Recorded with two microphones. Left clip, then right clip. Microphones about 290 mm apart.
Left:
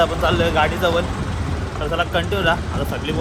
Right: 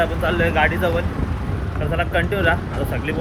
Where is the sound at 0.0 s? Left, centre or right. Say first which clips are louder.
Left 2 dB; centre.